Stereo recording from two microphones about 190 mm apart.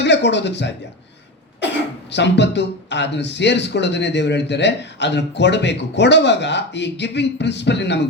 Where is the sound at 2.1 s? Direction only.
65° left (ahead or behind).